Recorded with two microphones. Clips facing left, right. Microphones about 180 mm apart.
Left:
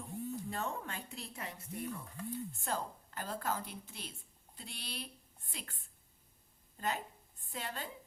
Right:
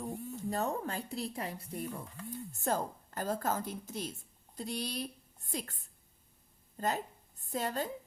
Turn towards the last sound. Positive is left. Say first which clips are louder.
# right 8 dB
turn(degrees=-40)  # may be behind; listen again after turning